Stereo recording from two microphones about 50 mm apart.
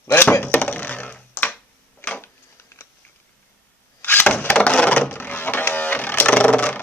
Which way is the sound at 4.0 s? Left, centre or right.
Left.